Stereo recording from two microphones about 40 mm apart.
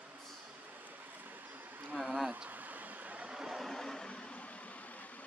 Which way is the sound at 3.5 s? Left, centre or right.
Centre.